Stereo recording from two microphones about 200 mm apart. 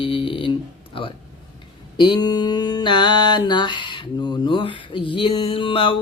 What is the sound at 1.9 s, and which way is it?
Mantra, 20° left (ahead or behind).